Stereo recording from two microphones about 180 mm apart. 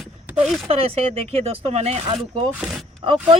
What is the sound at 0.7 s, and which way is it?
Speech, 35° right (ahead or behind).